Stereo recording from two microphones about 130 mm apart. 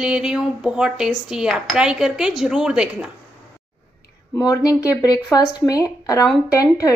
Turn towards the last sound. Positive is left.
turn(degrees=25)  # may be behind; listen again after turning